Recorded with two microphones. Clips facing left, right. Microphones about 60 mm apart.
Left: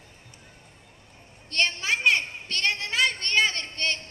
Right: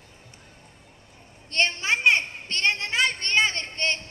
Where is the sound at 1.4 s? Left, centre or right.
Right.